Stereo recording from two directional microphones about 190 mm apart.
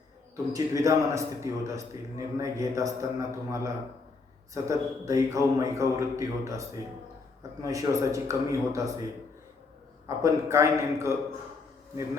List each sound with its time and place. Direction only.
0.5 s a man's voice: 15° right (ahead or behind)
10.2 s a man's voice: 15° right (ahead or behind)